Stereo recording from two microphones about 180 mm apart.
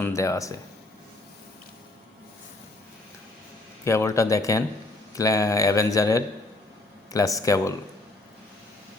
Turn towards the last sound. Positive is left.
turn(degrees=20)  # may be behind; listen again after turning